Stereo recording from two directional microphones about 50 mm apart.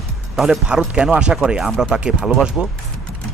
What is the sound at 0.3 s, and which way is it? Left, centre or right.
Speech, centre.